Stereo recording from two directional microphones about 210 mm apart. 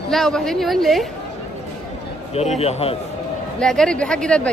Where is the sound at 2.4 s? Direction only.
30° left (ahead or behind).